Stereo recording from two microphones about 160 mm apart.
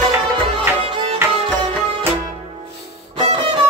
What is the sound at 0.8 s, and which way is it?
Music, 35° right (ahead or behind).